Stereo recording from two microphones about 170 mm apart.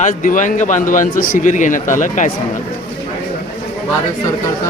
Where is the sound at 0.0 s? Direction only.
50° left (ahead or behind).